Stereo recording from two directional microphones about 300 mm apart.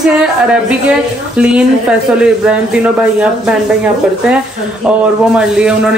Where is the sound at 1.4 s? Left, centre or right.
Centre.